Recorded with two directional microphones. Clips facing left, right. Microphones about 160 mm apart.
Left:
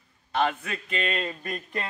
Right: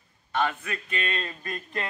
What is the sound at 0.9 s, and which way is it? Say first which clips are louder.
Speech: left 4 dB; 20° left (ahead or behind).